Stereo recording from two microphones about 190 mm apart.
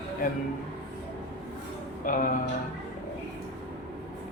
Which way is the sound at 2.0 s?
45° left (ahead or behind).